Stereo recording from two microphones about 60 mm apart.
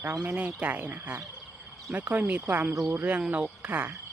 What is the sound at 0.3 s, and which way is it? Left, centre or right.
Speech, right.